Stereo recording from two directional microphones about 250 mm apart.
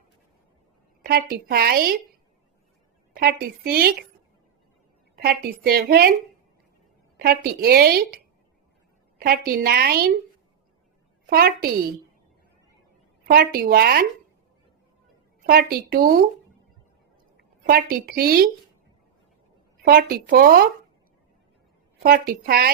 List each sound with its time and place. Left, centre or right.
1.0 s a woman's voice: right
3.2 s a woman's voice: right
5.1 s a woman's voice: right
7.2 s a woman's voice: right
11.3 s a woman's voice: right
13.2 s a woman's voice: right
15.4 s a woman's voice: right
17.7 s a woman's voice: right
19.8 s a woman's voice: right
22.0 s a woman's voice: right